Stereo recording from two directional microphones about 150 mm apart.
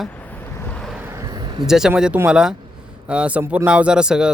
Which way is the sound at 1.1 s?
25° right (ahead or behind).